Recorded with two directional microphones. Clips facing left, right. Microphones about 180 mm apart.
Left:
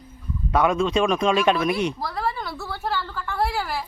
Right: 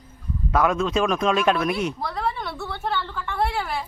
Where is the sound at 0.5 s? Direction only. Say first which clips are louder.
Left 1 dB; centre (ahead or behind).